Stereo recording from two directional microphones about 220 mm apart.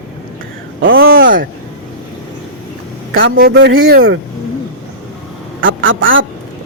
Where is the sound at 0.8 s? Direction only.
65° right (ahead or behind).